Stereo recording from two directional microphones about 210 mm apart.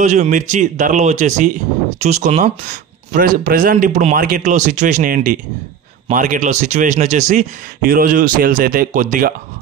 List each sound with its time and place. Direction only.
0.0 s speech: 35° right (ahead or behind)